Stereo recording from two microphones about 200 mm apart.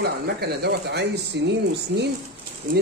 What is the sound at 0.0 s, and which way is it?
Speech, 55° right (ahead or behind).